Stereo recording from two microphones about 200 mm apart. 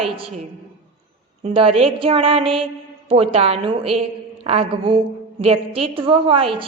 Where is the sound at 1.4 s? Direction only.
30° right (ahead or behind).